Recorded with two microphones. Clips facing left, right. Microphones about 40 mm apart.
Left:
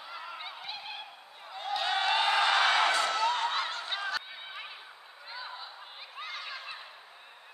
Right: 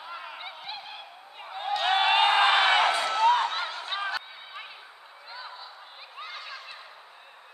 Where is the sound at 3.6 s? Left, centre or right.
Centre.